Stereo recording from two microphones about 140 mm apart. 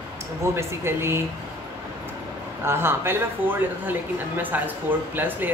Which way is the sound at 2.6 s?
15° right (ahead or behind).